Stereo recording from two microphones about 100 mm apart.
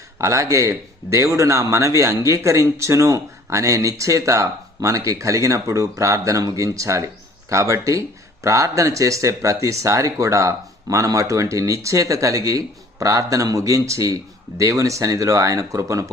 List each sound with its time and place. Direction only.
0.2 s speech: 30° right (ahead or behind)